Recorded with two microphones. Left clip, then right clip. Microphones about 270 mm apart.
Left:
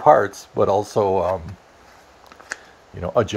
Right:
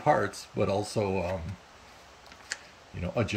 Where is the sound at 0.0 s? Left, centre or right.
Left.